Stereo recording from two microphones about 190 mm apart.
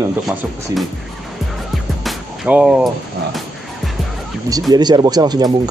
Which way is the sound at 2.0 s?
5° right (ahead or behind).